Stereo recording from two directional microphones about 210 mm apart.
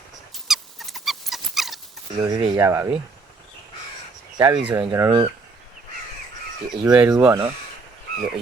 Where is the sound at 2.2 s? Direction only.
20° right (ahead or behind).